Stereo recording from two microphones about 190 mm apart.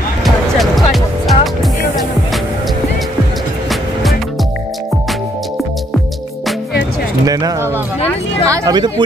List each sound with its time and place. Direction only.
0.2 s music: centre (ahead or behind)
8.5 s speech: 20° right (ahead or behind)